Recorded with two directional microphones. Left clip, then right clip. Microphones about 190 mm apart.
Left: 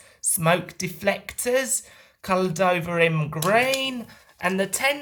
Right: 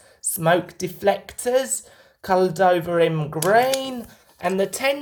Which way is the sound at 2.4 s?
50° left (ahead or behind).